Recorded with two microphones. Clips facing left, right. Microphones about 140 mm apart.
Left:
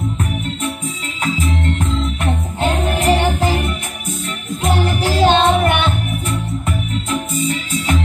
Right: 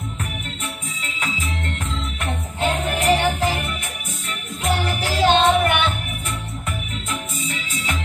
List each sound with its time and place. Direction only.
3.0 s music: 25° left (ahead or behind)
4.6 s music: 25° left (ahead or behind)